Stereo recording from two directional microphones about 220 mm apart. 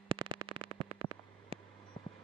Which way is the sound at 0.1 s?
20° right (ahead or behind).